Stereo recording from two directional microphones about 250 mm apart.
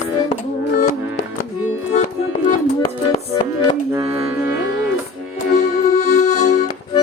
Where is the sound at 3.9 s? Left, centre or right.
Centre.